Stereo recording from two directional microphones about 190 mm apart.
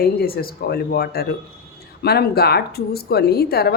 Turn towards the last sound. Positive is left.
turn(degrees=55)  # may be behind; listen again after turning